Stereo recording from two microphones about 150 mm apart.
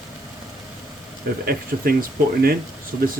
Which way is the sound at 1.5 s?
80° right.